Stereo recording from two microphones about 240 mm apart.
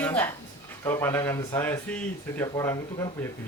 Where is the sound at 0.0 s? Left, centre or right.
Centre.